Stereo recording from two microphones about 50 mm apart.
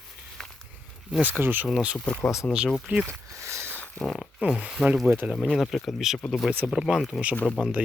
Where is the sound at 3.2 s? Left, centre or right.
Right.